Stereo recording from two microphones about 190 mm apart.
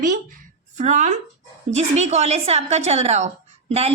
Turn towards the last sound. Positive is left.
turn(degrees=-35)  # may be behind; listen again after turning